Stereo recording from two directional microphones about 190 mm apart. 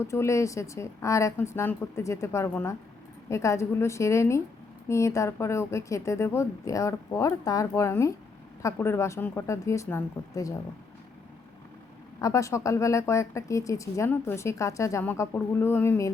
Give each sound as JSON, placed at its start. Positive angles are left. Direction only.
{"t": 0.0, "sound": "speech", "side_deg": 15}
{"t": 12.2, "sound": "speech", "side_deg": 15}